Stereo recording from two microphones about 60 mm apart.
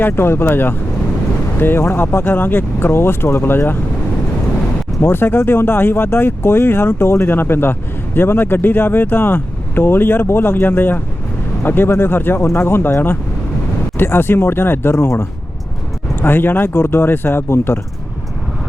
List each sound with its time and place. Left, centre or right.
0.0 s speech: left
4.9 s speech: left
16.2 s speech: left